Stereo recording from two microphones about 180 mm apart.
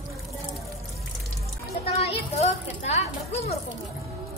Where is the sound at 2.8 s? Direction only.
35° left (ahead or behind).